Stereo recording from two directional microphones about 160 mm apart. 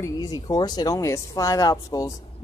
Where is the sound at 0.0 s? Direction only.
25° left (ahead or behind).